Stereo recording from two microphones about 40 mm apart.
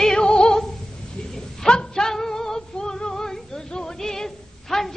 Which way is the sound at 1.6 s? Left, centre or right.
Centre.